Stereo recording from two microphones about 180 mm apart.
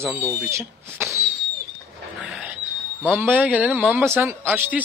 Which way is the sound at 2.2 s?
5° right (ahead or behind).